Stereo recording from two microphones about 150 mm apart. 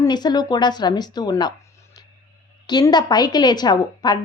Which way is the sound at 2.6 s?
30° left (ahead or behind).